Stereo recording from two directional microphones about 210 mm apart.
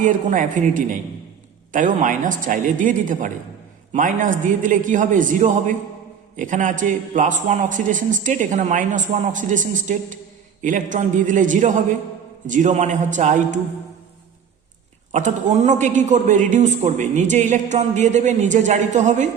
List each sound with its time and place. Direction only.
0.0 s a man's voice: 40° right (ahead or behind)
15.1 s a man's voice: 35° right (ahead or behind)